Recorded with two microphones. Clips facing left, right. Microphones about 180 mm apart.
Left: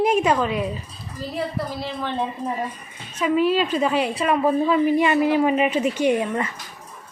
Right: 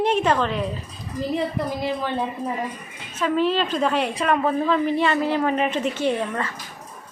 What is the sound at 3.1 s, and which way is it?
A woman's voice, 10° left (ahead or behind).